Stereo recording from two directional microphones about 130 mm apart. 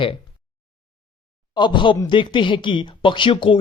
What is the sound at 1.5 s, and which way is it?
Speech, 35° left (ahead or behind).